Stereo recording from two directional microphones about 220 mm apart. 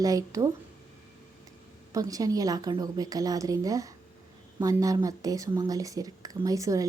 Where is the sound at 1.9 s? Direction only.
15° right (ahead or behind).